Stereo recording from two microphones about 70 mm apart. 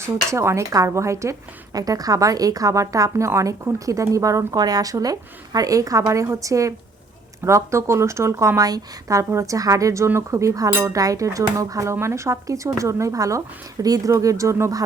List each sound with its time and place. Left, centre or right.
0.0 s speech: right
1.7 s a woman's voice: right
6.2 s speech: right
8.6 s speech: right
10.7 s speech: right
10.9 s speech: right
13.8 s a woman's voice: right
14.1 s speech: right